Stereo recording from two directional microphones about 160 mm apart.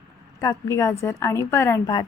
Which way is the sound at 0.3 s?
20° left (ahead or behind).